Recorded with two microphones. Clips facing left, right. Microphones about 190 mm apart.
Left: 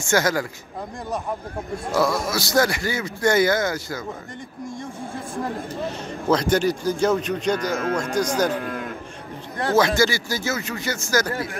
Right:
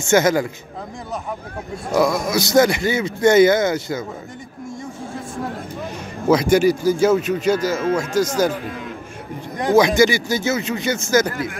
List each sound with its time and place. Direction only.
0.1 s a man's voice: 20° right (ahead or behind)
2.0 s a man's voice: 15° right (ahead or behind)
6.2 s speech: 10° right (ahead or behind)
9.6 s a man's voice: 15° right (ahead or behind)